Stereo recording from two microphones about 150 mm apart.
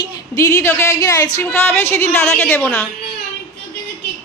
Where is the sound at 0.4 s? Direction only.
20° left (ahead or behind).